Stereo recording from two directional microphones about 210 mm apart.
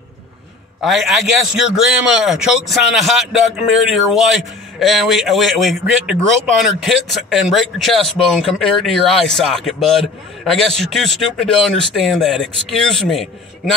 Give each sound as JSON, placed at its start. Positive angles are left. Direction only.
{"t": 0.8, "sound": "speech", "side_deg": 0}